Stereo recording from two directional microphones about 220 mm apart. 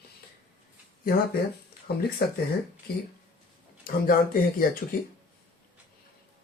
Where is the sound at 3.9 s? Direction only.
40° left (ahead or behind).